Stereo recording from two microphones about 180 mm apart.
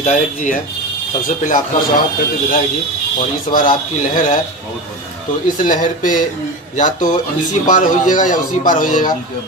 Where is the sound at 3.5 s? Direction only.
40° left (ahead or behind).